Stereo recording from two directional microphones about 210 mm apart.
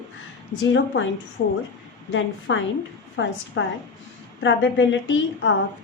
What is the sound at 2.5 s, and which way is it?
A woman's voice, 60° left (ahead or behind).